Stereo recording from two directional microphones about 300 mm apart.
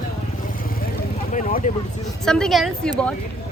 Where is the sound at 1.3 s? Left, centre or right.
Left.